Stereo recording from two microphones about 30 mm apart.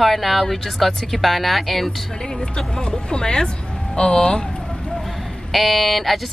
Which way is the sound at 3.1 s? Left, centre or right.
Left.